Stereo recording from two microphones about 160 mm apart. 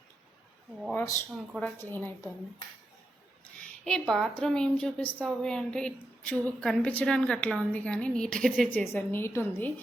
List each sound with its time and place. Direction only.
0.9 s a woman's voice: 15° left (ahead or behind)
1.4 s a woman's voice: centre (ahead or behind)
1.8 s a woman's voice: 10° left (ahead or behind)
3.8 s a woman's voice: 5° left (ahead or behind)
8.8 s a woman's voice: 15° left (ahead or behind)